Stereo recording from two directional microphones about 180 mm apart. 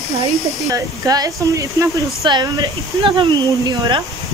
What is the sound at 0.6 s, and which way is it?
Speech, 20° right (ahead or behind).